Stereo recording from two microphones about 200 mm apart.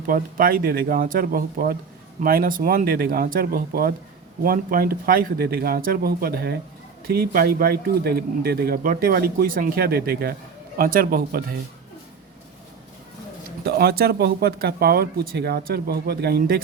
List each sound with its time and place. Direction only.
0.0 s speech: 45° right (ahead or behind)
13.7 s speech: 50° right (ahead or behind)